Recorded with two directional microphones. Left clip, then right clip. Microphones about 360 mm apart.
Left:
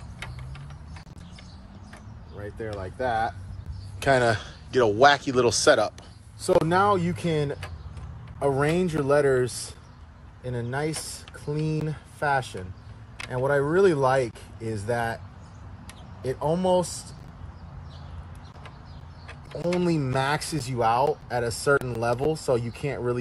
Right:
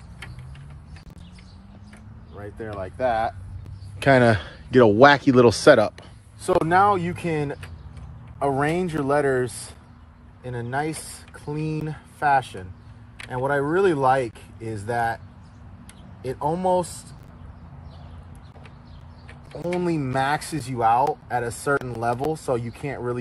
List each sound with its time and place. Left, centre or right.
2.3 s a man's voice: centre
6.4 s speech: centre
16.3 s speech: centre
19.8 s speech: centre